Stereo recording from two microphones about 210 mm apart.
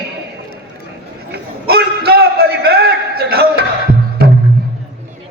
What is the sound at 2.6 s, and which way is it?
A man's voice, 50° right (ahead or behind).